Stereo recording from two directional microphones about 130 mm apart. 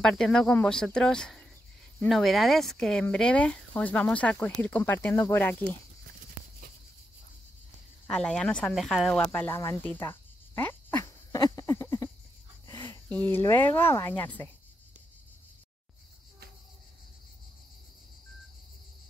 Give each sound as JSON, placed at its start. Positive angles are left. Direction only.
{"t": 0.0, "sound": "speech", "side_deg": 5}
{"t": 8.1, "sound": "speech", "side_deg": 5}
{"t": 9.8, "sound": "cricket", "side_deg": 20}
{"t": 12.6, "sound": "a sound", "side_deg": 20}
{"t": 13.3, "sound": "speech", "side_deg": 20}